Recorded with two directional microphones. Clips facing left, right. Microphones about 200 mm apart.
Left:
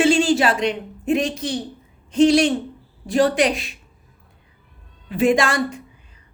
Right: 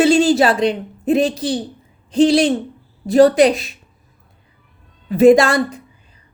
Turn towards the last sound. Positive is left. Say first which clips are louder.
# right 7 dB
turn(degrees=-35)  # may be behind; listen again after turning